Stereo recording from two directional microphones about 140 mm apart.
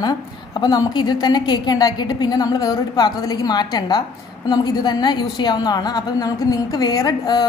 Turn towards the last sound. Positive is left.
turn(degrees=30)  # may be behind; listen again after turning